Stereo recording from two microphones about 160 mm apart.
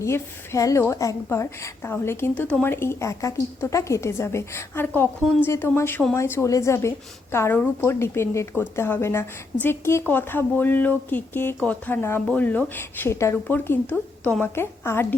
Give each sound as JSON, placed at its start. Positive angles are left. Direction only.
{"t": 0.0, "sound": "a woman's voice", "side_deg": 20}